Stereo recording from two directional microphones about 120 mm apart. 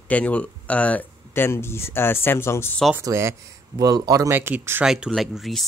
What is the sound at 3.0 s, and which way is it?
Speech, 25° right (ahead or behind).